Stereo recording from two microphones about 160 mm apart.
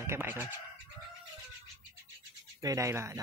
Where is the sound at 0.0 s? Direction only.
15° right (ahead or behind).